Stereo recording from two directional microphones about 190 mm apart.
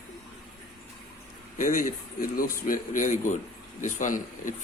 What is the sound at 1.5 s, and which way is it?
Speech, 45° left (ahead or behind).